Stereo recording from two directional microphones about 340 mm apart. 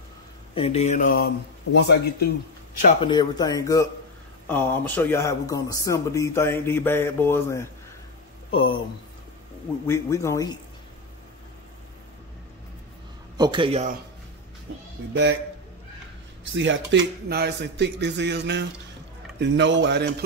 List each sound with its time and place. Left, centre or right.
0.6 s speech: centre
2.8 s speech: centre
9.8 s speech: centre
13.4 s a man's voice: centre
16.4 s speech: right